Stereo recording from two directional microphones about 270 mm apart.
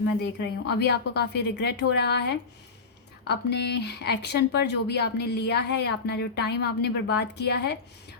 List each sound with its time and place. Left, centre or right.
0.0 s speech: left
3.2 s speech: left